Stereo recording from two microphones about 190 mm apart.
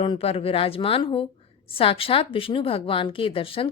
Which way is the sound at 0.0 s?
30° left (ahead or behind).